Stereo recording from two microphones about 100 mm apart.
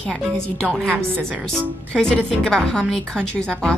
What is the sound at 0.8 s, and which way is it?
Speech, 15° right (ahead or behind).